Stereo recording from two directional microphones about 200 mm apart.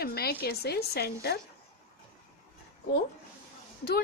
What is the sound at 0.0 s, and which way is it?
A woman's voice, 50° left (ahead or behind).